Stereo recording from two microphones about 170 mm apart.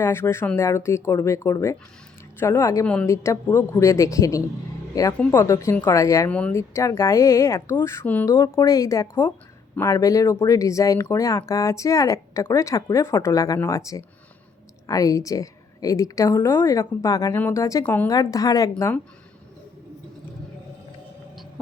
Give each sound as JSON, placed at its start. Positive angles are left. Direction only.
{"t": 0.0, "sound": "speech", "side_deg": 15}
{"t": 2.8, "sound": "speech", "side_deg": 5}
{"t": 6.3, "sound": "speech", "side_deg": 5}